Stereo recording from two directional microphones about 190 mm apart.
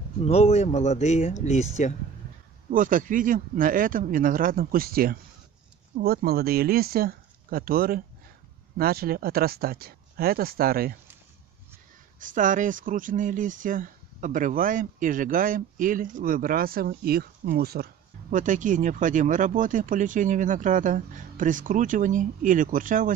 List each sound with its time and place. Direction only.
0.2 s speech: 35° left (ahead or behind)
2.7 s speech: 45° right (ahead or behind)
12.2 s speech: 45° right (ahead or behind)